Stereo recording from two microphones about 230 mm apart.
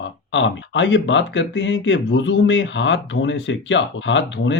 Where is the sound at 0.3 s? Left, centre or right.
Left.